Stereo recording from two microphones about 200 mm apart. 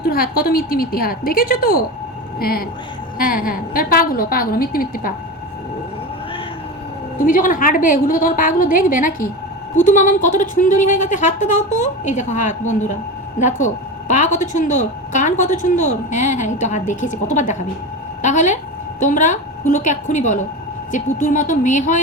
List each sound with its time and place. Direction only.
0.0 s a woman's voice: 45° left (ahead or behind)
7.3 s a woman's voice: 40° left (ahead or behind)